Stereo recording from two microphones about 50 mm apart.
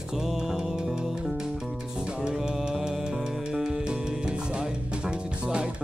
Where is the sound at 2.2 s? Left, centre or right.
Centre.